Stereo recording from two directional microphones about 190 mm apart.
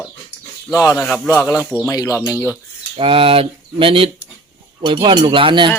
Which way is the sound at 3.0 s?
30° right (ahead or behind).